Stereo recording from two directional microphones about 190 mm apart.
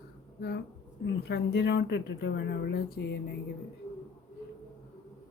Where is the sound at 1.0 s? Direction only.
60° left (ahead or behind).